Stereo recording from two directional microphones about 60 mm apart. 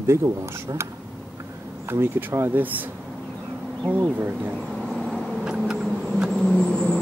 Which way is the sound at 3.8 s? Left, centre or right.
Right.